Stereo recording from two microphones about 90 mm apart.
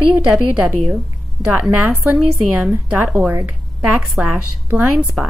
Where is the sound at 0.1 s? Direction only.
15° right (ahead or behind).